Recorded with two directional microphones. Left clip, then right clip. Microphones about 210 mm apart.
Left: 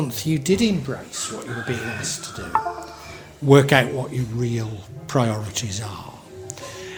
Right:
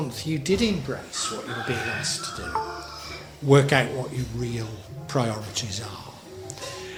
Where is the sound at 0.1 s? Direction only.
40° left (ahead or behind).